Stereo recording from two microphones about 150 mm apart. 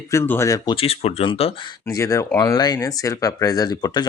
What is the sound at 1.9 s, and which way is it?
Speech, 20° left (ahead or behind).